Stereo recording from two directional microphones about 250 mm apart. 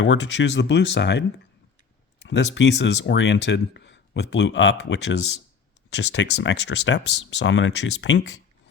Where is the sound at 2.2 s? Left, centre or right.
Left.